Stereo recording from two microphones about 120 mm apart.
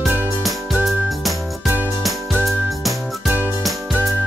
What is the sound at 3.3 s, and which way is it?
Music, 15° right (ahead or behind).